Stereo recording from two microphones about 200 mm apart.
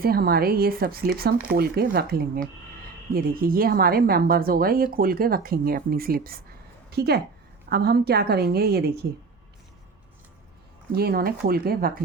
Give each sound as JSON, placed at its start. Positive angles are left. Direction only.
{"t": 0.0, "sound": "a woman's voice", "side_deg": -50}
{"t": 10.9, "sound": "a woman's voice", "side_deg": -50}